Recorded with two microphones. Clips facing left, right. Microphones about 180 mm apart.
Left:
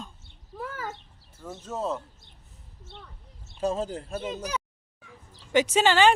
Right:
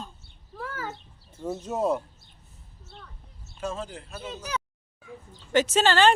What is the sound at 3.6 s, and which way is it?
Speech, 35° left (ahead or behind).